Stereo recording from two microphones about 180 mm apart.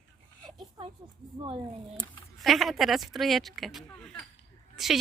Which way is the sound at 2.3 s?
Centre (ahead or behind).